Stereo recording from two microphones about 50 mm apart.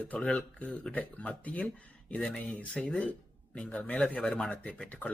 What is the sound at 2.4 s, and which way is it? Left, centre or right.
Speech, centre.